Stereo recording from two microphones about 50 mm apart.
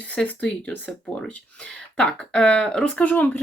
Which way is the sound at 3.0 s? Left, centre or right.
Left.